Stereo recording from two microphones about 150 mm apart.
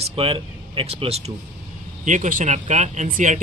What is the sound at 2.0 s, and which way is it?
Speech, 60° right (ahead or behind).